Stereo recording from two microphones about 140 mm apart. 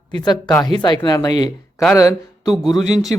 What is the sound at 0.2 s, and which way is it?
Speech, 30° left (ahead or behind).